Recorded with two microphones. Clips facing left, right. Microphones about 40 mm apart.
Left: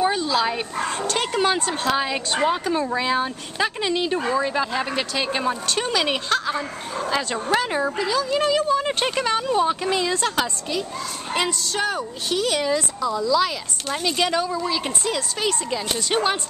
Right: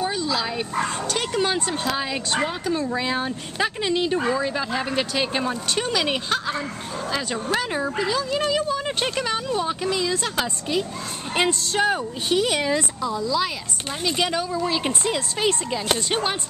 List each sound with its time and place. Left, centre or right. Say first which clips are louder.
0.0 s dog: left 4 dB; left
0.3 s speech: left 3 dB; centre
0.7 s speech: right 2 dB; centre
3.0 s speech: left 2 dB; centre
7.1 s speech: left 3 dB; centre
7.9 s speech: left 1 dB; centre
9.8 s a woman's voice: left 1 dB; left
10.1 s speech: left 2 dB; centre
11.3 s a woman's voice: right 2 dB; right; by 14.7 s centre
15.4 s a woman's voice: right 2 dB; right
16.1 s speech: left 8 dB; centre